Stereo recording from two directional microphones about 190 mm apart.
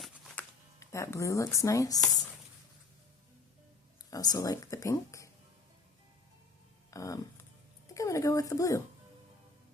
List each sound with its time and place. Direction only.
0.8 s speech: 15° left (ahead or behind)
4.1 s speech: 20° left (ahead or behind)
6.9 s speech: 20° left (ahead or behind)